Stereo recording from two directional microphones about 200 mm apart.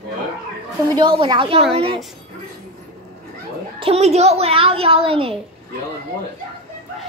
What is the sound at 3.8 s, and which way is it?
A woman's voice, 30° right (ahead or behind).